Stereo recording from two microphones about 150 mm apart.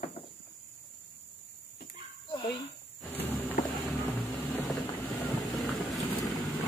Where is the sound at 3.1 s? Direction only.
15° left (ahead or behind).